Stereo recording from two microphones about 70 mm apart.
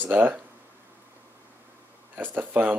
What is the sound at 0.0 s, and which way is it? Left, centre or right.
Speech, right.